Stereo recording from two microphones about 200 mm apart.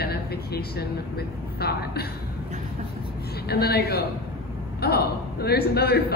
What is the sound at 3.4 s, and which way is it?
A man's voice, 50° left (ahead or behind).